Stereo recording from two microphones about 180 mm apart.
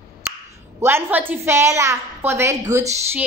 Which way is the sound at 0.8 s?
15° right (ahead or behind).